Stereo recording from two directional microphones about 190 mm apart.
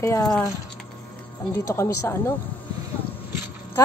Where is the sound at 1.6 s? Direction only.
15° left (ahead or behind).